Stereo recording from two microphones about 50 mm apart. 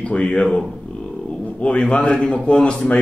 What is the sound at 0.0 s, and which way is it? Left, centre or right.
A man's voice, left.